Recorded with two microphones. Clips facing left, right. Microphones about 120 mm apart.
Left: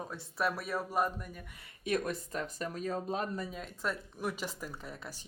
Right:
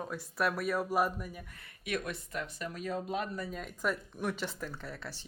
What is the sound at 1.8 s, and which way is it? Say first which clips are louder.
Speech: left 4 dB; 35° left (ahead or behind).